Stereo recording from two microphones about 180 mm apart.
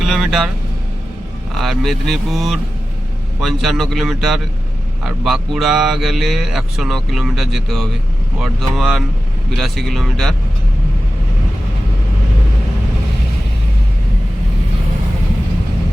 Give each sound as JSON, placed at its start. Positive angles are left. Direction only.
{"t": 0.0, "sound": "speech", "side_deg": 0}
{"t": 1.5, "sound": "speech", "side_deg": 0}